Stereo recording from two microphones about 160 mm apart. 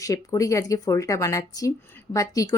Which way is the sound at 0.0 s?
20° left (ahead or behind).